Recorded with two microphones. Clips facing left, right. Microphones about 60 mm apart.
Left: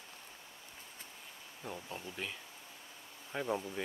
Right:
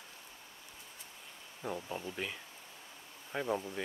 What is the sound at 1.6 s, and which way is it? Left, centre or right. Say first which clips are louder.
Speech: right 5 dB; centre.